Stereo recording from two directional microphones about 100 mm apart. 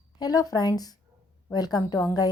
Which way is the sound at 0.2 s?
40° left (ahead or behind).